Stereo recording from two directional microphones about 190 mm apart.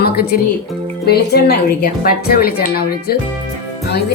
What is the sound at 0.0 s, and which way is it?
A woman's voice, 55° left (ahead or behind).